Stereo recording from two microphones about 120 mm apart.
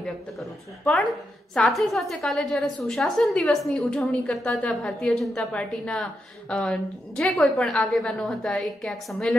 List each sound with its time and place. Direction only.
0.0 s a woman's voice: 5° left (ahead or behind)